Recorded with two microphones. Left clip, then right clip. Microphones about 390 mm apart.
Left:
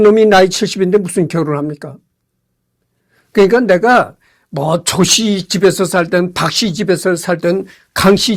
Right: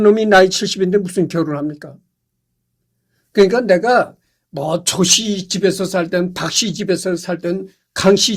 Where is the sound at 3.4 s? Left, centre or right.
Left.